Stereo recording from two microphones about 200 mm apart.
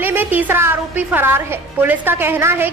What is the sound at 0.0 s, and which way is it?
A woman's voice, 10° right (ahead or behind).